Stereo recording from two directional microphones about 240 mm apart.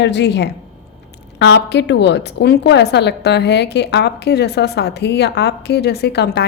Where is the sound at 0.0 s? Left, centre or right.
Left.